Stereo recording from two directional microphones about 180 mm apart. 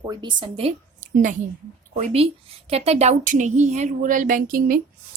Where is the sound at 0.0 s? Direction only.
20° right (ahead or behind).